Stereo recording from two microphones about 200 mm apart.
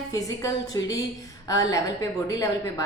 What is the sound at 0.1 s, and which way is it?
A woman's voice, 15° left (ahead or behind).